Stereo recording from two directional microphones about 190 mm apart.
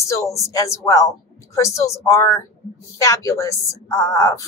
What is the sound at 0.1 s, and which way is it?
Speech, 15° left (ahead or behind).